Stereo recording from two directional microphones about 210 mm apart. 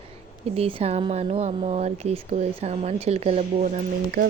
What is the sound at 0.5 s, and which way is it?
Speech, 25° right (ahead or behind).